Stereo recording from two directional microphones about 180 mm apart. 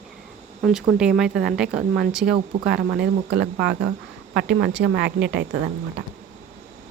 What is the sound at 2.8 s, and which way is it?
A woman's voice, 65° right (ahead or behind).